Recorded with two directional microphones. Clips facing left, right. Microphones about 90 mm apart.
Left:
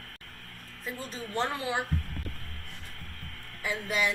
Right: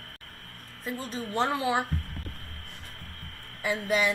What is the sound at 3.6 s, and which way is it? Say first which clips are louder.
Speech: right 4 dB; 5° right (ahead or behind).